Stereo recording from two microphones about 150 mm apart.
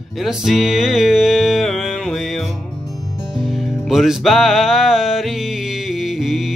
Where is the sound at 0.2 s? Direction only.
Centre (ahead or behind).